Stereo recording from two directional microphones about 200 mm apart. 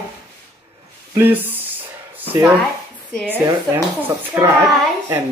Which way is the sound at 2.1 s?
10° right (ahead or behind).